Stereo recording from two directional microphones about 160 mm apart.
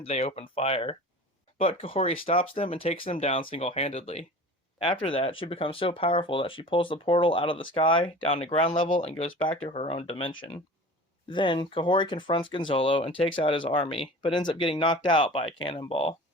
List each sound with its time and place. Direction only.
0.0 s speech: 40° left (ahead or behind)